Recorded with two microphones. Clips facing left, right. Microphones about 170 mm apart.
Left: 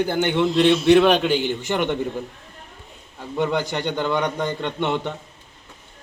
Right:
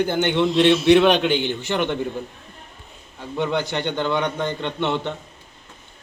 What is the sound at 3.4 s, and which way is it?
A man's voice, 10° left (ahead or behind).